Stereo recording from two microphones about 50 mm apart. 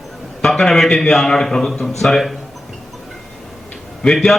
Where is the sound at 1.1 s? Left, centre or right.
Centre.